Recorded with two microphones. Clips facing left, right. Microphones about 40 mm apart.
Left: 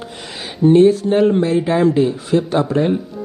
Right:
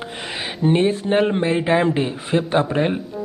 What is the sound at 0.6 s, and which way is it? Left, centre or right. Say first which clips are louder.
Speech: left 8 dB; right.